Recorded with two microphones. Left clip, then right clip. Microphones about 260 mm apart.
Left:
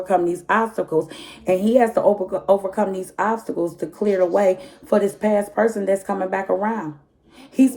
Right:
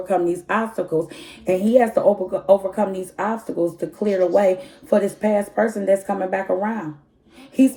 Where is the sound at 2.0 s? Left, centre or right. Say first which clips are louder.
Even; left.